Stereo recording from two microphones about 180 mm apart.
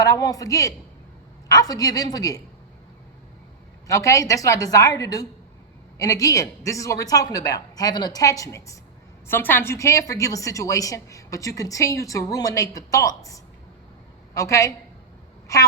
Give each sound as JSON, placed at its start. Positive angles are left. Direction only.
{"t": 0.0, "sound": "speech", "side_deg": 20}
{"t": 3.8, "sound": "a woman's voice", "side_deg": 15}